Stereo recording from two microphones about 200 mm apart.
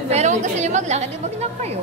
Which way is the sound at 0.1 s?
35° right (ahead or behind).